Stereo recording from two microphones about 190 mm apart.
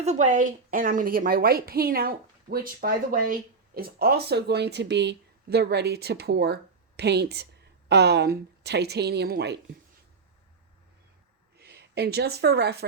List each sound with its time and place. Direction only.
0.0 s a woman's voice: 40° right (ahead or behind); by 9.6 s 60° right (ahead or behind)
11.5 s speech: 55° right (ahead or behind)